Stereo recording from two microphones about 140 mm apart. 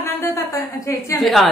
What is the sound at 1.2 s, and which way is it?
Speech, centre (ahead or behind).